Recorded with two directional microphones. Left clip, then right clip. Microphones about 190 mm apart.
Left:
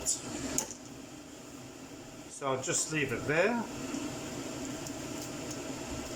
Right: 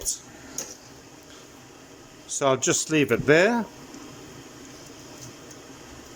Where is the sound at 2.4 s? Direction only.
55° right (ahead or behind).